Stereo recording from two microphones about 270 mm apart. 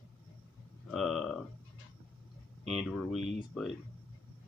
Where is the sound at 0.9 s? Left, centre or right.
Centre.